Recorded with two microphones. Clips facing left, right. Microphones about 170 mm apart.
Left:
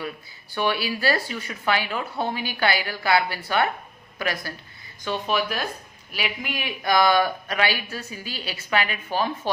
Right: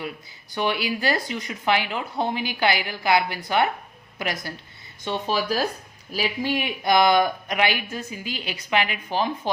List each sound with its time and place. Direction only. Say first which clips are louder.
0.5 s speech: even; 20° right (ahead or behind)